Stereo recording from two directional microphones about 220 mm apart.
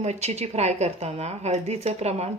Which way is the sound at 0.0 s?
30° right (ahead or behind).